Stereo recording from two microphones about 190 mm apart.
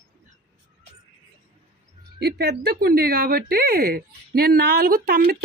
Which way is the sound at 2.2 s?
55° right (ahead or behind).